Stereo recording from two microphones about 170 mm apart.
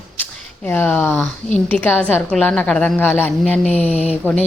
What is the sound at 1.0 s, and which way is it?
A woman's voice, 15° left (ahead or behind).